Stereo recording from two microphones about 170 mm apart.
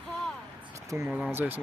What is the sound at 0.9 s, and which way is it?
Speech, 15° right (ahead or behind).